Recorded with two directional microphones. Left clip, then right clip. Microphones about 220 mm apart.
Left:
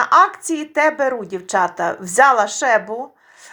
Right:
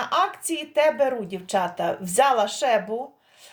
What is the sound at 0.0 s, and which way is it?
Speech, 20° left (ahead or behind).